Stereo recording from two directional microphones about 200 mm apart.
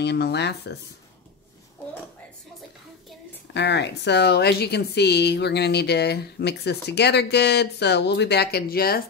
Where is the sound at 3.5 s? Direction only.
60° left (ahead or behind).